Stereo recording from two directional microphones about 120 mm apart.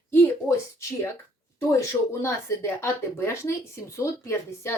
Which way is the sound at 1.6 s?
25° left (ahead or behind).